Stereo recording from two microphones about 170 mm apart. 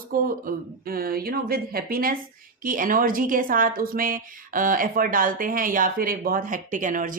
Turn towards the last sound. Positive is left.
turn(degrees=-50)  # may be behind; listen again after turning